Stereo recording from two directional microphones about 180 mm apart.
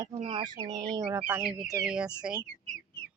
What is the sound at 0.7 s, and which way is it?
Speech, 20° right (ahead or behind).